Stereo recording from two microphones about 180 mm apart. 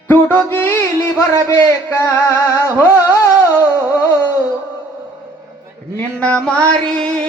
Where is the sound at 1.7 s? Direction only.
15° left (ahead or behind).